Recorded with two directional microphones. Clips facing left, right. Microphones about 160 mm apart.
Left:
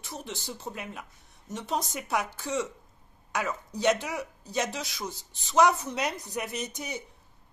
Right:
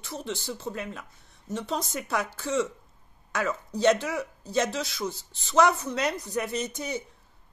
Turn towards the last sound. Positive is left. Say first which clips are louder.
# right 4 dB
turn(degrees=15)  # may be behind; listen again after turning